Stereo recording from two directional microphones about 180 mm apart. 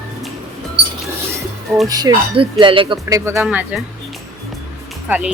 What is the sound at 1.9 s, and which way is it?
Speech, 20° right (ahead or behind).